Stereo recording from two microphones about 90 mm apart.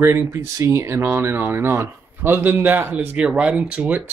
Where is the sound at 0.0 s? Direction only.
30° right (ahead or behind); by 4.0 s 15° right (ahead or behind).